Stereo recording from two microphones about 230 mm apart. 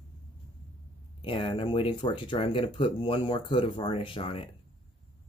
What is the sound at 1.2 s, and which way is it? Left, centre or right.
Speech, left.